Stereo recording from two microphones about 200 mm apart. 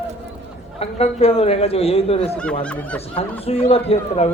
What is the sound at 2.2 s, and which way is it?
Speech, 5° left (ahead or behind).